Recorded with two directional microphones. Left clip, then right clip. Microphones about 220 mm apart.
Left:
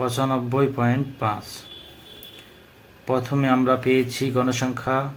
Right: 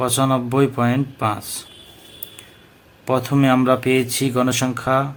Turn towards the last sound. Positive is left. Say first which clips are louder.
# right 5 dB
turn(degrees=-45)  # may be behind; listen again after turning